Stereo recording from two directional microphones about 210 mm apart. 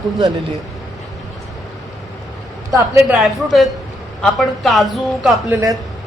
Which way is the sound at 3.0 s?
Centre (ahead or behind).